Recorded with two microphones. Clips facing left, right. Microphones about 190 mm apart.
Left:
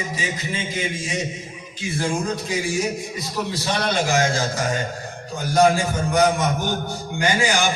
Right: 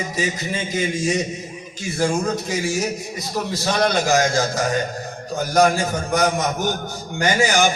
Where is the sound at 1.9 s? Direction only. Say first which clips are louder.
Right 3 dB; 45° right (ahead or behind).